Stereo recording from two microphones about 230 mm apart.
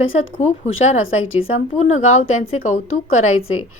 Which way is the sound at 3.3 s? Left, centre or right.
Left.